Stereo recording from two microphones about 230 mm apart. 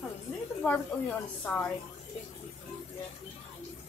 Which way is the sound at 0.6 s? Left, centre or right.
Centre.